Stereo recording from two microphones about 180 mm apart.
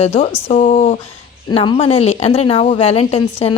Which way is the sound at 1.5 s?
35° left (ahead or behind).